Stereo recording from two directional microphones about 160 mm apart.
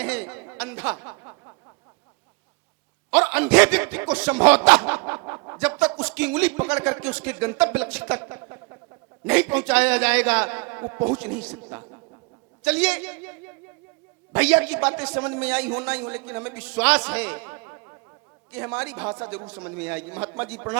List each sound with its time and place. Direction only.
0.0 s a sound: 10° right (ahead or behind)
3.1 s a man's voice: 10° right (ahead or behind)
12.6 s a man's voice: 5° right (ahead or behind)